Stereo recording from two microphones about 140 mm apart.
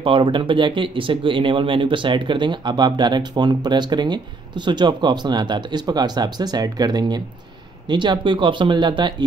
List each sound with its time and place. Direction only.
0.0 s speech: 40° right (ahead or behind)